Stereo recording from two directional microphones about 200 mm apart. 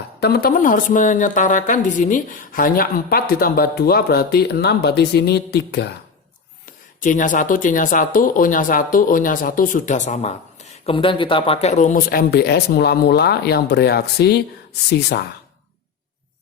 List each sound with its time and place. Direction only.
0.2 s speech: 55° left (ahead or behind)
7.0 s speech: 40° left (ahead or behind)